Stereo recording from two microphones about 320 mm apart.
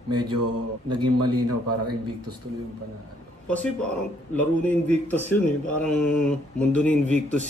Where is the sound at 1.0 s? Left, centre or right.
Right.